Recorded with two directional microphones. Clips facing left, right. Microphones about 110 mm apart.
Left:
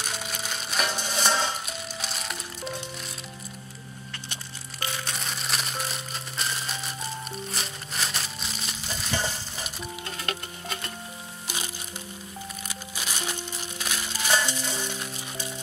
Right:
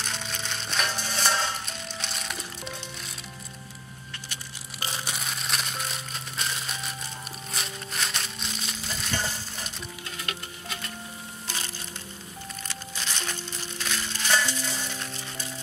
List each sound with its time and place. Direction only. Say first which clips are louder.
0.0 s music: left 1 dB; 5° left (ahead or behind)
4.7 s crumpling: left 1 dB; 30° right (ahead or behind)
5.0 s crumpling: even; 5° right (ahead or behind)
11.4 s music: left 1 dB; 15° left (ahead or behind)